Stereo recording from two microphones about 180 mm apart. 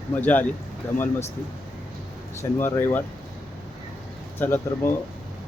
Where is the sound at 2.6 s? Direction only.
10° left (ahead or behind).